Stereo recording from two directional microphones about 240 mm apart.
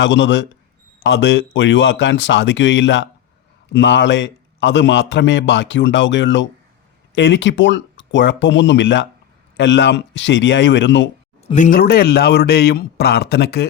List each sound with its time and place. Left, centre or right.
0.0 s a man's voice: left
11.4 s a man's voice: left